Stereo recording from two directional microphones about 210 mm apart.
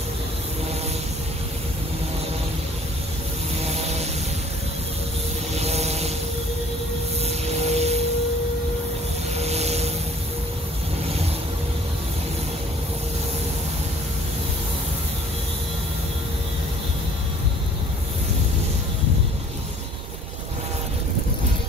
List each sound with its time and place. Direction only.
3.6 s vehicle: 30° right (ahead or behind)
5.5 s vehicle: 30° right (ahead or behind)
7.2 s aircraft: 30° right (ahead or behind)
9.4 s vehicle: 30° right (ahead or behind)